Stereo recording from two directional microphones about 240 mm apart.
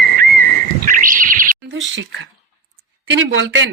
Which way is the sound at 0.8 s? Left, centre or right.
Right.